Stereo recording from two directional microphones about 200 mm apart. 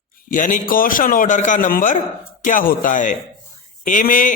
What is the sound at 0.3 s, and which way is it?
A man's voice, 40° left (ahead or behind).